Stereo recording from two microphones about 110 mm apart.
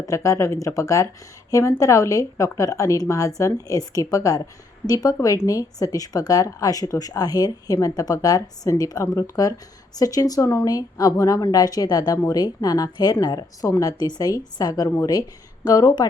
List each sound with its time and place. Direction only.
0.0 s speech: 30° left (ahead or behind)